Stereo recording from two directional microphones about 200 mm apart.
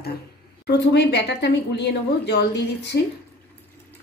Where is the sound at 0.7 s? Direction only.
55° left (ahead or behind).